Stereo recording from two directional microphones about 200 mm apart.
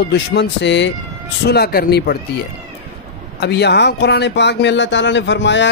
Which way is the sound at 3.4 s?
55° left (ahead or behind).